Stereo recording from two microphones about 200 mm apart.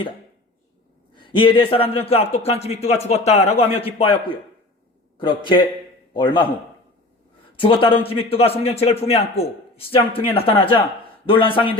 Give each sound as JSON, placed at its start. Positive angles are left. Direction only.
{"t": 1.1, "sound": "a man's voice", "side_deg": 25}
{"t": 7.5, "sound": "a man's voice", "side_deg": 25}